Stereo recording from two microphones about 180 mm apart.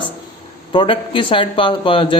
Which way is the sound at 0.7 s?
30° left (ahead or behind).